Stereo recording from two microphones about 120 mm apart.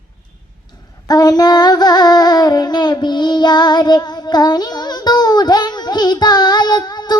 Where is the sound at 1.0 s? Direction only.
35° left (ahead or behind).